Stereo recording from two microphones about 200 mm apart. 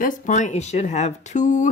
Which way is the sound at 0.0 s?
40° left (ahead or behind).